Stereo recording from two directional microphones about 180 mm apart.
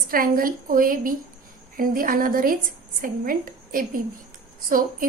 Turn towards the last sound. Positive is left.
turn(degrees=-50)  # may be behind; listen again after turning